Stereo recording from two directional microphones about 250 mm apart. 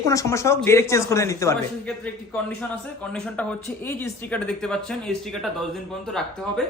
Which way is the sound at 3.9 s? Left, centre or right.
Centre.